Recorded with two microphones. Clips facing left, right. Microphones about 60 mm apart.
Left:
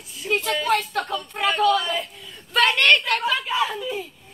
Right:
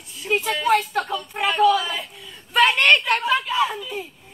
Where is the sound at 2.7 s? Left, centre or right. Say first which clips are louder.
Right 1 dB; centre.